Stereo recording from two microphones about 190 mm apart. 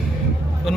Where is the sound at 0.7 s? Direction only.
Centre (ahead or behind).